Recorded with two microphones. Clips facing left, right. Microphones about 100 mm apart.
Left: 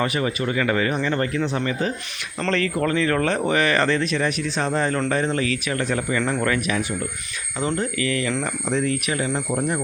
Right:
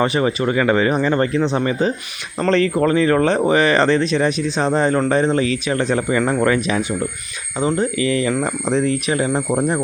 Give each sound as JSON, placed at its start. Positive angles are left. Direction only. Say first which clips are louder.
{"t": 0.0, "sound": "speech", "louder": "right 6 dB", "side_deg": -30}